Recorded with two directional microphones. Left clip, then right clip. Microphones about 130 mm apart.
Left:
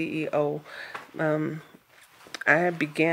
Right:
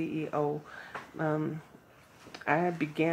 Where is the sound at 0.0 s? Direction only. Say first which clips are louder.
Left 6 dB; 30° left (ahead or behind).